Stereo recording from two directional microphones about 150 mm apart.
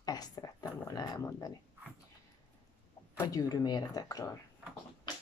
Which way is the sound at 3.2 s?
25° left (ahead or behind).